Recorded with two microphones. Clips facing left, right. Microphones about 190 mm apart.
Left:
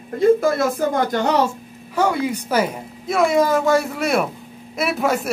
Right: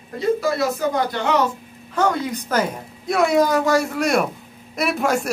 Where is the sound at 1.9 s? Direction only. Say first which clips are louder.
Left 1 dB; 10° left (ahead or behind).